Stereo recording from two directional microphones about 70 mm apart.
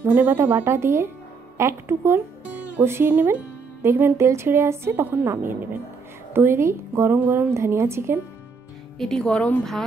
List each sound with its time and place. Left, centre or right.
0.0 s a woman's voice: right
7.2 s speech: right
7.5 s a woman's voice: right
8.9 s speech: centre